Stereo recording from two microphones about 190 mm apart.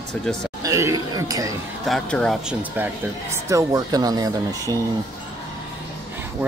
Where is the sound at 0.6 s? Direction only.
15° right (ahead or behind).